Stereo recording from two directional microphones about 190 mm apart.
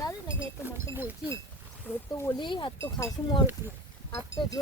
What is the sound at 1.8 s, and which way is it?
Speech, 15° left (ahead or behind).